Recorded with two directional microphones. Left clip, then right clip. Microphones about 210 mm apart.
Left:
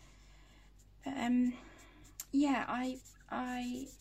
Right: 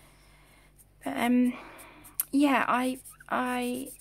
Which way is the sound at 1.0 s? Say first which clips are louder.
Right 8 dB; 30° right (ahead or behind).